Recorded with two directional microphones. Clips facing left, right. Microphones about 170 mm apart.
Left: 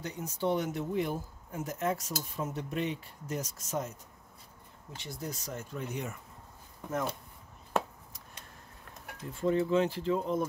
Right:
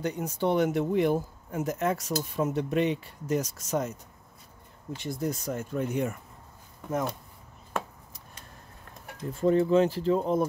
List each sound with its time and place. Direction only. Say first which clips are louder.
0.0 s speech: right 5 dB; 65° right (ahead or behind)
4.9 s speech: right 9 dB; 50° right (ahead or behind)
9.3 s speech: right 5 dB; 40° right (ahead or behind)